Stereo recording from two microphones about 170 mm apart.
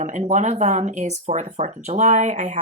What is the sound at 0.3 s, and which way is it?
Speech, 40° right (ahead or behind).